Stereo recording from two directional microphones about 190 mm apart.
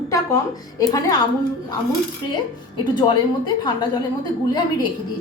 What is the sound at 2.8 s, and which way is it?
Speech, 25° left (ahead or behind).